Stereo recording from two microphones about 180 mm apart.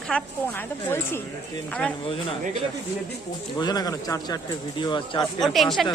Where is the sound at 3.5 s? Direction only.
20° left (ahead or behind).